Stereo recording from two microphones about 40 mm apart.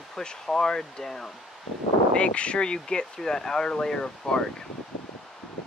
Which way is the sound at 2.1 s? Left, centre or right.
Left.